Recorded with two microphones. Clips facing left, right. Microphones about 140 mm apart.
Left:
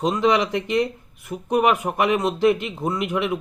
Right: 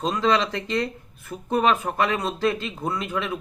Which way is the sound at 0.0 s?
20° left (ahead or behind).